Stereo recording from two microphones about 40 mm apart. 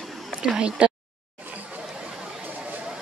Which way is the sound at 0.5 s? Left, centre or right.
Right.